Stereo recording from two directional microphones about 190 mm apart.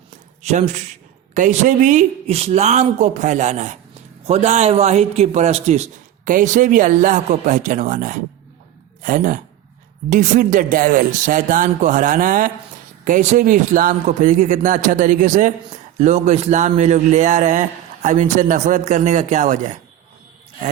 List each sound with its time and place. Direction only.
0.4 s a man's voice: 35° right (ahead or behind)